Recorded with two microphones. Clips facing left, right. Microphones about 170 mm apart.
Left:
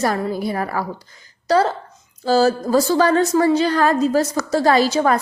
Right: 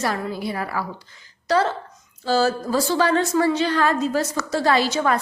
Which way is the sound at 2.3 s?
40° left (ahead or behind).